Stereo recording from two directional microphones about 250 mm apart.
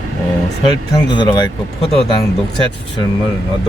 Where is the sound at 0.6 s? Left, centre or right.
Centre.